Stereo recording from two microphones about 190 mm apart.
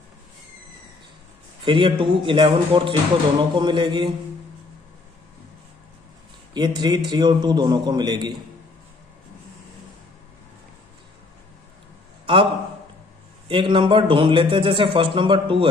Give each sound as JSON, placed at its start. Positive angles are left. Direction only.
{"t": 1.6, "sound": "speech", "side_deg": -25}
{"t": 6.5, "sound": "speech", "side_deg": -20}
{"t": 13.5, "sound": "speech", "side_deg": -25}